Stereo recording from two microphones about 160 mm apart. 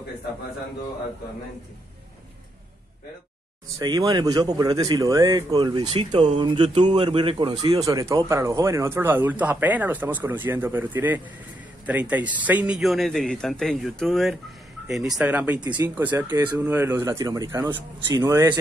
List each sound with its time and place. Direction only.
3.7 s speech: 25° right (ahead or behind)
7.8 s speech: 20° right (ahead or behind)